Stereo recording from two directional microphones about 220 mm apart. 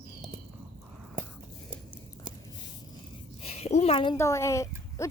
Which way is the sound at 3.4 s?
30° left (ahead or behind).